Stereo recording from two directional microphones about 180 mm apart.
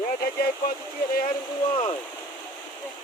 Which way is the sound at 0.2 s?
55° left (ahead or behind).